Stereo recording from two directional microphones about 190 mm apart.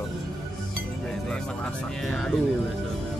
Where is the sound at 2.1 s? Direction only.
Centre (ahead or behind).